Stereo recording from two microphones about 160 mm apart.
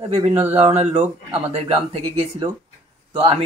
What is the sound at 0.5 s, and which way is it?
Speech, 45° right (ahead or behind).